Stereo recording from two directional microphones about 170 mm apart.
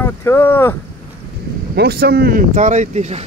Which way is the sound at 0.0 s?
15° left (ahead or behind).